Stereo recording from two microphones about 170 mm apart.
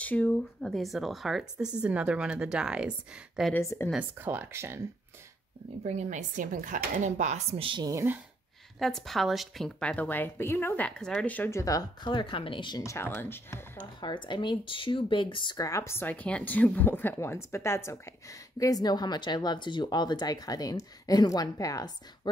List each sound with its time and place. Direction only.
0.0 s speech: 10° left (ahead or behind)
3.5 s a woman's voice: 15° left (ahead or behind)
3.9 s speech: 10° right (ahead or behind)
5.9 s speech: 45° right (ahead or behind); by 8.2 s 15° right (ahead or behind)
8.7 s a woman's voice: centre (ahead or behind)
14.0 s a woman's voice: 25° left (ahead or behind)